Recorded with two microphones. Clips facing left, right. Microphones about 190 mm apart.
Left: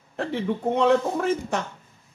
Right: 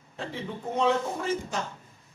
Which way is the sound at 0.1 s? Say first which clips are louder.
Left 9 dB; 65° left (ahead or behind).